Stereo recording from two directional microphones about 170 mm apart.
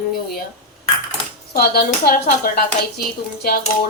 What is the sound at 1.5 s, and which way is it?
A woman's voice, 65° left (ahead or behind).